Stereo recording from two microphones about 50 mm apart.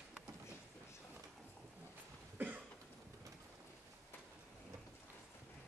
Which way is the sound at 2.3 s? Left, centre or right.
Right.